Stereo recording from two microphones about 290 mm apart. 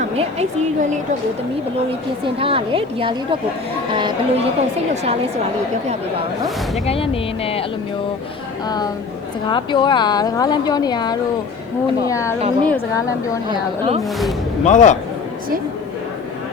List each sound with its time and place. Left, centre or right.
0.0 s a woman's voice: right
2.4 s a woman's voice: centre
6.8 s speech: centre
8.6 s speech: centre
13.5 s a woman's voice: centre
14.6 s speech: left